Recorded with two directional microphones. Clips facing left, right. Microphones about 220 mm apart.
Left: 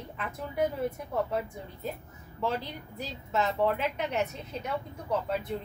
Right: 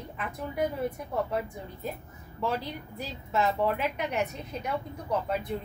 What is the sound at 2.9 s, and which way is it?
A woman's voice, 10° right (ahead or behind).